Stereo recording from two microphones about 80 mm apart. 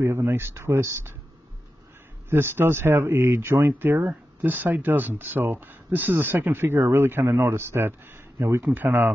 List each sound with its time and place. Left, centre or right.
0.0 s speech: right
2.2 s speech: right